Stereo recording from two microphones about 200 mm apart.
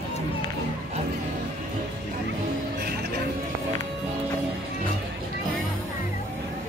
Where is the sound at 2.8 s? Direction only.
50° right (ahead or behind).